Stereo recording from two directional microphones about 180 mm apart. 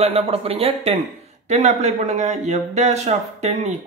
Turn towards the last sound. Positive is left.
turn(degrees=-40)  # may be behind; listen again after turning